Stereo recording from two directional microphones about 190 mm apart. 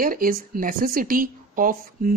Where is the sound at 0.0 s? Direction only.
50° right (ahead or behind).